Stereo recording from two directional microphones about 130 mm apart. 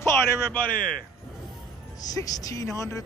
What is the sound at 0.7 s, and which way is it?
Speech, 90° left.